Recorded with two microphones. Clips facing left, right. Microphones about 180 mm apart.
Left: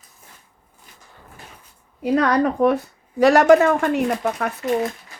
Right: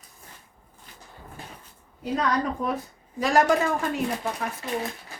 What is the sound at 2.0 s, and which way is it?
Speech, 70° left (ahead or behind).